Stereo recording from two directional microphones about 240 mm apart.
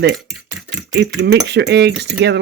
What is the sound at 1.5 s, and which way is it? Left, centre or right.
Speech, right.